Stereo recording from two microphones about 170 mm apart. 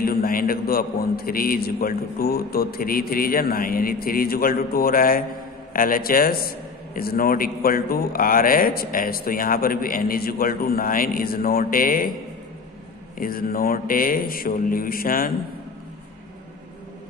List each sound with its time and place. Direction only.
0.0 s a man's voice: 60° left (ahead or behind)
13.2 s a man's voice: 60° left (ahead or behind)